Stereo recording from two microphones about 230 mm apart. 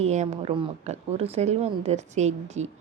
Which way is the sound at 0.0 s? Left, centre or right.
Right.